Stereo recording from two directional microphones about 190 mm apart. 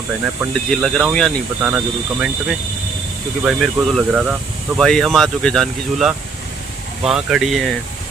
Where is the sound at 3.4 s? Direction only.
5° right (ahead or behind).